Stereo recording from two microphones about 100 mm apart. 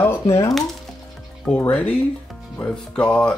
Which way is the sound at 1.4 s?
15° left (ahead or behind).